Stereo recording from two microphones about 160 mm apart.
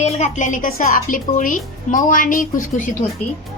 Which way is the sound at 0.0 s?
50° left (ahead or behind).